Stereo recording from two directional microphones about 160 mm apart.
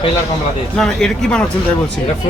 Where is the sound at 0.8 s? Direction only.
5° left (ahead or behind).